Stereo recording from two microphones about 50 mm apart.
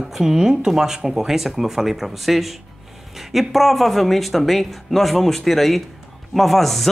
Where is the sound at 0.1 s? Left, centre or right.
Centre.